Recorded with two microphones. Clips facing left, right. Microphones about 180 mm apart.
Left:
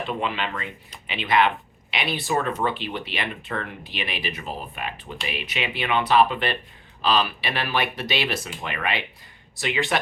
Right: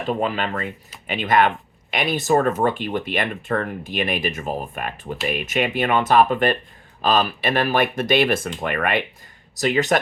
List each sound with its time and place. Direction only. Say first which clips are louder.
0.0 s speech: right 5 dB; 40° right (ahead or behind)